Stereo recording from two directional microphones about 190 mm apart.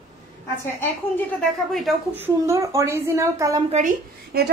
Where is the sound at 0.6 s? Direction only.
10° left (ahead or behind).